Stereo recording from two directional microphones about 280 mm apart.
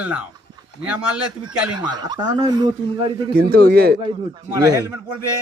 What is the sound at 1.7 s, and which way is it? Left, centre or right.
Speech, centre.